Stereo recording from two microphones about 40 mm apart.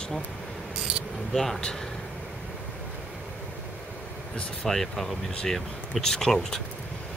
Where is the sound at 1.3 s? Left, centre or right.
Centre.